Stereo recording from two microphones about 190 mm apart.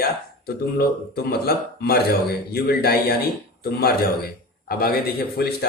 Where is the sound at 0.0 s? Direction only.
55° left (ahead or behind).